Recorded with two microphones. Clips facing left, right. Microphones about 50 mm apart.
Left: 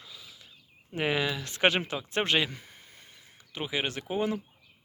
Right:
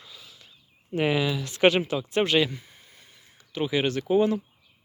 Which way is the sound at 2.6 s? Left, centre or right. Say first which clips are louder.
Left 1 dB; left.